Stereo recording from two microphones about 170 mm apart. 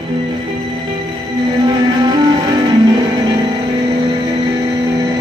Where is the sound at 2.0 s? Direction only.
25° right (ahead or behind).